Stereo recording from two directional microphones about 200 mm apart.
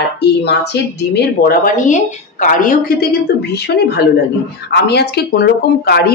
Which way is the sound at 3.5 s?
55° left (ahead or behind).